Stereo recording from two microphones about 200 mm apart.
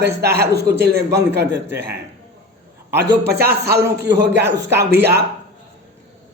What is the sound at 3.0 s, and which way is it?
Music, 50° right (ahead or behind).